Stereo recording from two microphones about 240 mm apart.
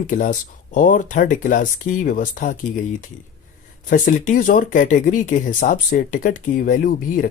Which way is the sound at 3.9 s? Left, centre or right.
Left.